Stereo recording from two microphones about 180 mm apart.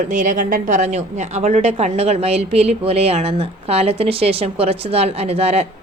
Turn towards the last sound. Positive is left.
turn(degrees=-35)  # may be behind; listen again after turning